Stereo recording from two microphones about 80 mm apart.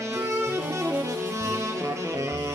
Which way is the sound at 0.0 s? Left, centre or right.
Right.